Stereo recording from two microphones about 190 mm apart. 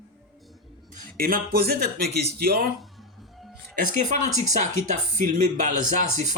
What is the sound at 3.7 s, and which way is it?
Speech, 40° right (ahead or behind).